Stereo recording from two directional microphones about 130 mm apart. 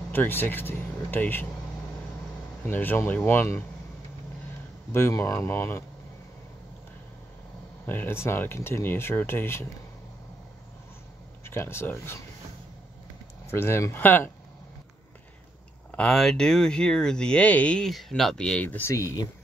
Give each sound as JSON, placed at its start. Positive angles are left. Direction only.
{"t": 0.1, "sound": "speech", "side_deg": 15}
{"t": 2.6, "sound": "speech", "side_deg": 15}
{"t": 4.9, "sound": "speech", "side_deg": 20}
{"t": 7.8, "sound": "speech", "side_deg": 15}
{"t": 11.4, "sound": "speech", "side_deg": 20}
{"t": 13.5, "sound": "speech", "side_deg": 20}
{"t": 15.9, "sound": "speech", "side_deg": 5}